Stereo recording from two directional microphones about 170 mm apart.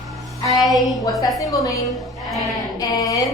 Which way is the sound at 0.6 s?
Centre (ahead or behind).